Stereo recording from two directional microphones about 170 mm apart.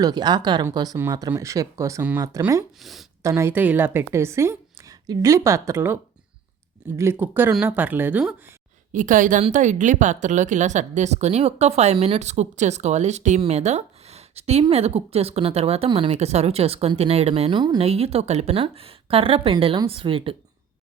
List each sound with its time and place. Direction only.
0.0 s a woman's voice: 25° right (ahead or behind); by 3.1 s centre (ahead or behind)
3.2 s a woman's voice: 15° right (ahead or behind)
8.9 s a woman's voice: 50° right (ahead or behind); by 20.3 s 30° right (ahead or behind)